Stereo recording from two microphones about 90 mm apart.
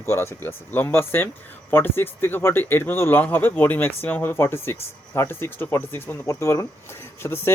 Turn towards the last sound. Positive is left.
turn(degrees=35)  # may be behind; listen again after turning